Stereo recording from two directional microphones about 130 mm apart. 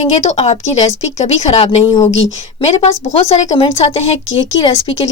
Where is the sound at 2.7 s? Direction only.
50° left (ahead or behind).